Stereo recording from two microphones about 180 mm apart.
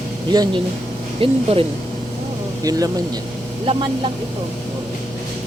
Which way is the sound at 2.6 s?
20° right (ahead or behind).